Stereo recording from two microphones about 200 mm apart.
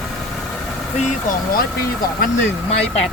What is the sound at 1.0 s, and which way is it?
Speech, 45° left (ahead or behind).